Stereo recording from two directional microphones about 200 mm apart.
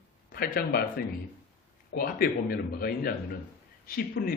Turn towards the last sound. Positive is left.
turn(degrees=45)  # may be behind; listen again after turning